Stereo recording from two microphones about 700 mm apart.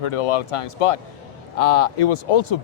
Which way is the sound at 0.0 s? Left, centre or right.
Left.